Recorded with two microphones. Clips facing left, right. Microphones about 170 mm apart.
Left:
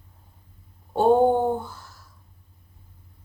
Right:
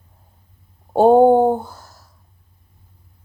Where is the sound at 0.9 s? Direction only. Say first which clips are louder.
Right 7 dB; 40° right (ahead or behind).